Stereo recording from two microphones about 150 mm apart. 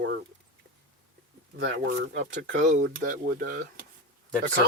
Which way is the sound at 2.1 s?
60° right (ahead or behind).